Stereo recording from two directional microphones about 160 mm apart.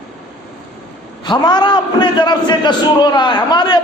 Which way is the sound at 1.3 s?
25° left (ahead or behind).